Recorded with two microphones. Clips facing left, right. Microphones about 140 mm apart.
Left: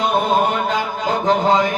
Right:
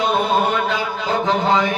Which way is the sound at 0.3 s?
45° left (ahead or behind).